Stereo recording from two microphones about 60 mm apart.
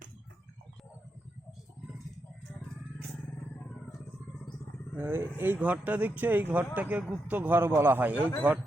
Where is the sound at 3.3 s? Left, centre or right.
Left.